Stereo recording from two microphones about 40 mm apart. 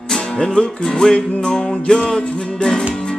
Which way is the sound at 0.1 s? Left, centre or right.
Centre.